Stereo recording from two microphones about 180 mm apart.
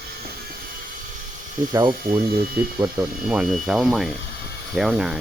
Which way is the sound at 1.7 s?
15° right (ahead or behind).